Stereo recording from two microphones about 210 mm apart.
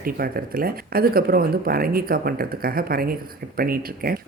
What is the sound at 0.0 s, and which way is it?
Speech, 45° right (ahead or behind).